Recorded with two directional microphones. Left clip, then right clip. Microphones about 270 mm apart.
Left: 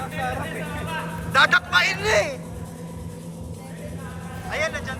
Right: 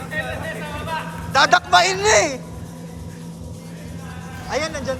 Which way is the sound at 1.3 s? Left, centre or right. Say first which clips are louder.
Right 3 dB; centre.